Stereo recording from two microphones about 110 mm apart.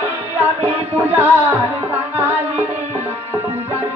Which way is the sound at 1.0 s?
20° right (ahead or behind).